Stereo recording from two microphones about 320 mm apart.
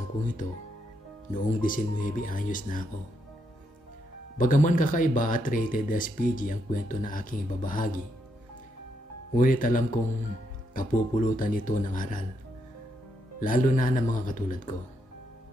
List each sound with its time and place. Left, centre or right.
1.3 s speech: left
4.4 s speech: left
9.3 s speech: left
13.4 s speech: left